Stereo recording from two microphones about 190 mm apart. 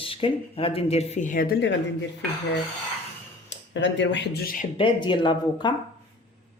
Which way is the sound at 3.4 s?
70° left (ahead or behind).